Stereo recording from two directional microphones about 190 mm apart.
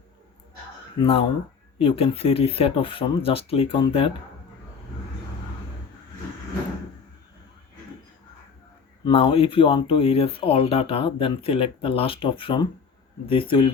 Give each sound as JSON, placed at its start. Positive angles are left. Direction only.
{"t": 0.9, "sound": "speech", "side_deg": 30}
{"t": 9.0, "sound": "speech", "side_deg": 30}